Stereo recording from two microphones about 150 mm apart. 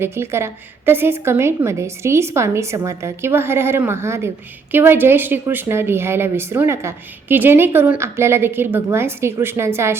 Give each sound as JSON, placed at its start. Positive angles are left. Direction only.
{"t": 0.0, "sound": "a woman's voice", "side_deg": -15}